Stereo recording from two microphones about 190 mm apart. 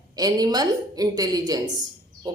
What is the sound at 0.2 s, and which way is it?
A woman's voice, 20° right (ahead or behind).